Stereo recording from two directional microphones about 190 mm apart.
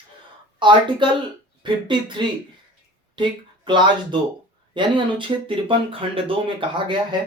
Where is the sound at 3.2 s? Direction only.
25° right (ahead or behind).